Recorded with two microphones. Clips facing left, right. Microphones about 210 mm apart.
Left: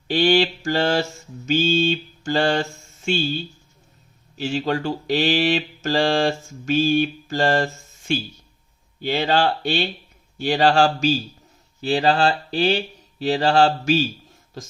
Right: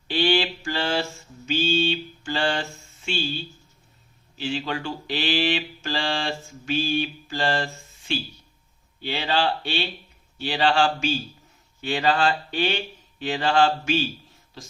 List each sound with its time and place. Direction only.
0.1 s mantra: 40° left (ahead or behind)
4.4 s speech: 40° left (ahead or behind)
10.3 s mantra: 45° left (ahead or behind)
14.6 s speech: 45° left (ahead or behind)